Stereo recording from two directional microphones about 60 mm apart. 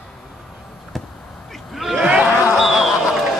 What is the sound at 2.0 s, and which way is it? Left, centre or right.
Speech, centre.